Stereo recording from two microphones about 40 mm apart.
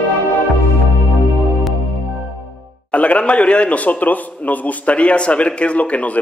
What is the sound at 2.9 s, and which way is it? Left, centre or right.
A man's voice, left.